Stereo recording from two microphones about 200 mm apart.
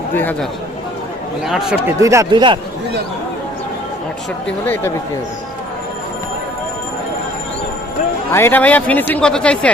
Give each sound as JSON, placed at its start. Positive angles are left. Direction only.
{"t": 0.2, "sound": "a man's voice", "side_deg": 10}
{"t": 2.0, "sound": "speech", "side_deg": -15}
{"t": 4.6, "sound": "a man's voice", "side_deg": 10}
{"t": 8.3, "sound": "a man's voice", "side_deg": 10}